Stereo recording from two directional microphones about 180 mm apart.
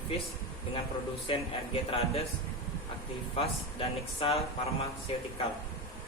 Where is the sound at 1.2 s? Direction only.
30° left (ahead or behind).